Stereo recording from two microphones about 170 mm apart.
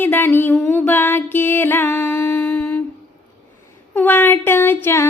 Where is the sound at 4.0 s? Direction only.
10° left (ahead or behind).